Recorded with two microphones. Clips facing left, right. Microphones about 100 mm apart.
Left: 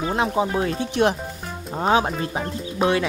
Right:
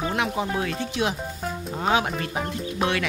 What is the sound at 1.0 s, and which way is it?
Speech, 50° left (ahead or behind).